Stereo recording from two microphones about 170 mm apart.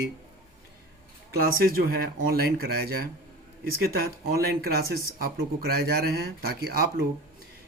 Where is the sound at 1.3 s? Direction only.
65° right (ahead or behind).